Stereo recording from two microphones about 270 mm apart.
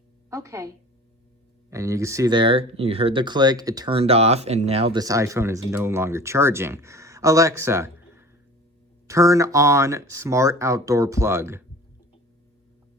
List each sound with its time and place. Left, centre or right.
0.3 s speech: centre
1.7 s speech: centre